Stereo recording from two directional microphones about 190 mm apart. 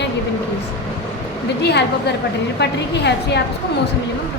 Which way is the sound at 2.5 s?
60° left (ahead or behind).